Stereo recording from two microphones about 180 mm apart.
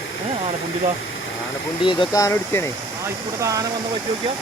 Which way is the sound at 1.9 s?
25° left (ahead or behind).